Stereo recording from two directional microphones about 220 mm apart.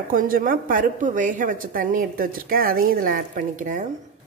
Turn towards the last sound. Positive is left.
turn(degrees=-35)  # may be behind; listen again after turning